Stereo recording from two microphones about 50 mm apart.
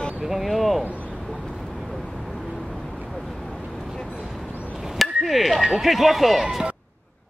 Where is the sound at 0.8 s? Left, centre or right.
Left.